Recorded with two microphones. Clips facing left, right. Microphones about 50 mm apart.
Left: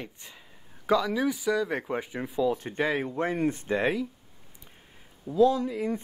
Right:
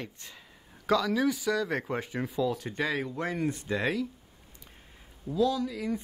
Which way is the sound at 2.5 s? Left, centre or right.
Left.